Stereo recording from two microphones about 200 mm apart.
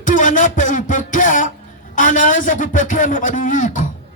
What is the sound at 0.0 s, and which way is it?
Speech, 40° left (ahead or behind).